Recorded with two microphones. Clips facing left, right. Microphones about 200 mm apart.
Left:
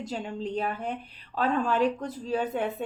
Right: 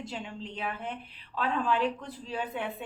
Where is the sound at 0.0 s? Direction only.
40° left (ahead or behind).